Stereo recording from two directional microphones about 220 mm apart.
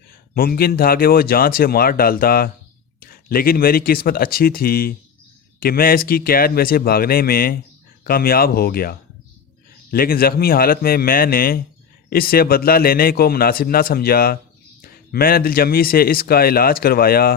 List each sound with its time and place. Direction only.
0.3 s a man's voice: 40° left (ahead or behind)